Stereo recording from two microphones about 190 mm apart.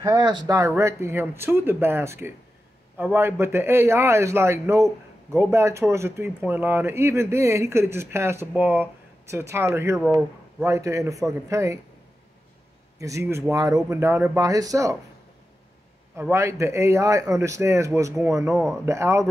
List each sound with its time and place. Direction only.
0.0 s a man's voice: 20° right (ahead or behind)
13.0 s a man's voice: 15° right (ahead or behind)
16.2 s a man's voice: 15° right (ahead or behind)
18.5 s speech: centre (ahead or behind)
18.9 s a man's voice: 15° right (ahead or behind)